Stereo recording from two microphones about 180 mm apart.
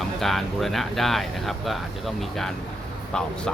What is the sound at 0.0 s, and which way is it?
Speech, centre (ahead or behind).